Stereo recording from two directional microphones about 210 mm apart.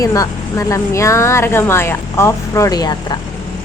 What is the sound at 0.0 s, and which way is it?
Speech, 15° left (ahead or behind).